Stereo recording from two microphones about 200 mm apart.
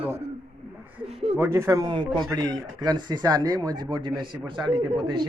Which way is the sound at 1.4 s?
15° right (ahead or behind).